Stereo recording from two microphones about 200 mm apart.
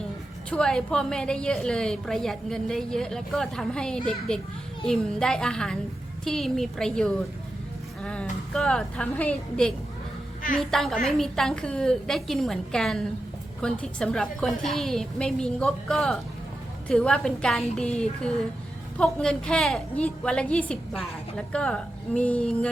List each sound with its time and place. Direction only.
0.5 s a woman's voice: 5° left (ahead or behind)
18.9 s a woman's voice: 5° left (ahead or behind)